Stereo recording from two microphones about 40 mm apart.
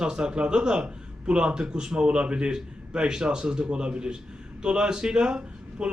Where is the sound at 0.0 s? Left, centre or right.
Right.